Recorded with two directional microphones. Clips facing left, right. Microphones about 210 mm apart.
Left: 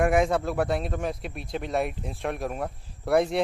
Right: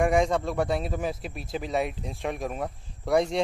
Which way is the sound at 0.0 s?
5° left (ahead or behind).